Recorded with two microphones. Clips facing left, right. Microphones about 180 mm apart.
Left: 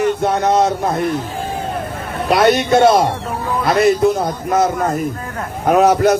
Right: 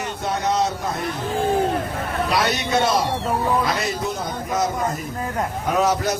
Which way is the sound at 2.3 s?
55° left (ahead or behind).